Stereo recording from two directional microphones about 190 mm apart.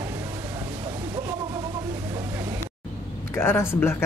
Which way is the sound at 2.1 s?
15° right (ahead or behind).